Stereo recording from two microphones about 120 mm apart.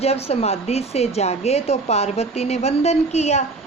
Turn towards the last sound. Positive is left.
turn(degrees=70)  # may be behind; listen again after turning